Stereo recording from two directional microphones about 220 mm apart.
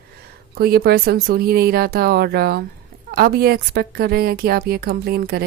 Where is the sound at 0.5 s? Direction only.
45° right (ahead or behind).